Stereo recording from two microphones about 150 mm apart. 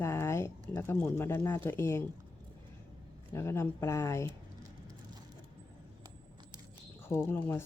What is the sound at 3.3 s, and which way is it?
Speech, 20° left (ahead or behind).